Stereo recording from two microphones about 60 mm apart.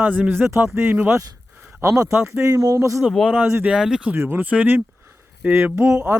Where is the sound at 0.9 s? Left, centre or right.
Right.